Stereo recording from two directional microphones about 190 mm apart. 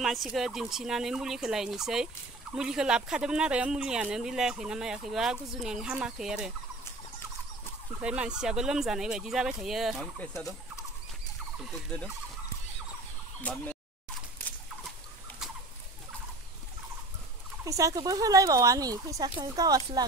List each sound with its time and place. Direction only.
0.0 s speech: centre (ahead or behind)
8.0 s speech: 5° right (ahead or behind)
13.4 s speech: 5° left (ahead or behind)
14.4 s rodents: 10° left (ahead or behind)
17.6 s speech: 15° right (ahead or behind)